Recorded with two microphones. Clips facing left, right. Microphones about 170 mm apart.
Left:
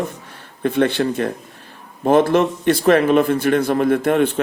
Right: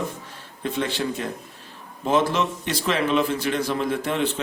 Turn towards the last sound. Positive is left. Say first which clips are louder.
# left 8 dB
turn(degrees=55)  # may be behind; listen again after turning